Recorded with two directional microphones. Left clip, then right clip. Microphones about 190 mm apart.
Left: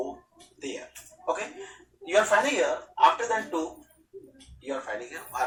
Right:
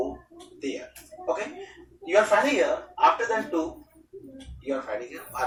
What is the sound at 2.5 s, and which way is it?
Speech, 35° left (ahead or behind).